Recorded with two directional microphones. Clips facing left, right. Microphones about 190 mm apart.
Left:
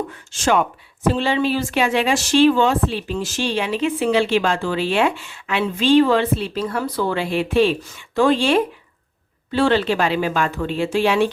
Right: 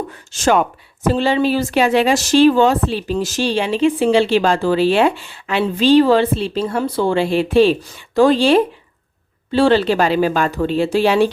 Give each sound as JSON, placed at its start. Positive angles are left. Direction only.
{"t": 0.3, "sound": "speech", "side_deg": -40}